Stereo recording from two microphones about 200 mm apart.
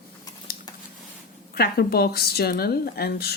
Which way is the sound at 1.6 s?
50° left (ahead or behind).